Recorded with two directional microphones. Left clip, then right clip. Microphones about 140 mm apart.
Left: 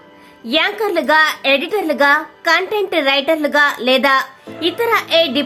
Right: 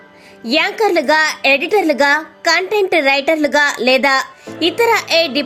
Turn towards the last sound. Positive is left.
turn(degrees=-30)  # may be behind; listen again after turning